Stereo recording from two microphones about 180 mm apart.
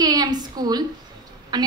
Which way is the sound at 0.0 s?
20° right (ahead or behind).